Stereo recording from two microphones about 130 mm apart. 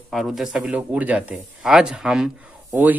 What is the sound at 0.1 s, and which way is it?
Speech, centre (ahead or behind).